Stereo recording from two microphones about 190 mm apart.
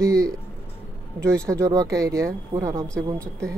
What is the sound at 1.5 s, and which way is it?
Speech, 15° right (ahead or behind).